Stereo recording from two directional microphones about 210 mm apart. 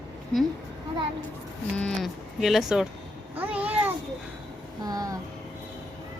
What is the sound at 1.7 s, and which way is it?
Speech, 5° left (ahead or behind).